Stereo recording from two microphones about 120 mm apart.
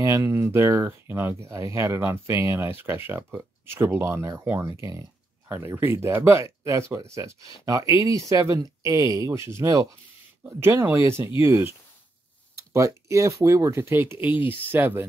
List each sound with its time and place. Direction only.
0.0 s speech: 25° right (ahead or behind)